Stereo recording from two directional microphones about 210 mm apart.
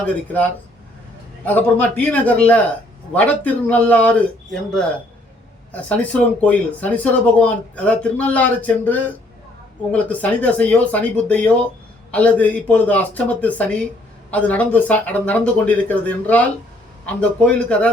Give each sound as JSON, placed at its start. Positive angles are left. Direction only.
{"t": 0.0, "sound": "speech", "side_deg": 5}
{"t": 5.7, "sound": "speech", "side_deg": 5}